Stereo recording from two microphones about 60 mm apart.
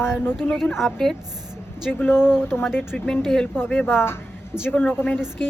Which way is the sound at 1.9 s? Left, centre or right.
Left.